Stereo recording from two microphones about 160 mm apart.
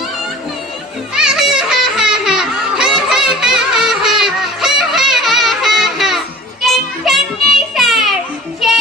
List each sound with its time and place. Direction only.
1.1 s music: 5° right (ahead or behind)